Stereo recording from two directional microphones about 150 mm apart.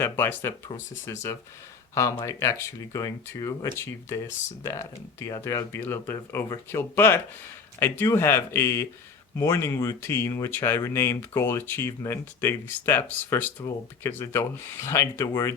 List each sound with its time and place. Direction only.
0.0 s speech: 15° left (ahead or behind)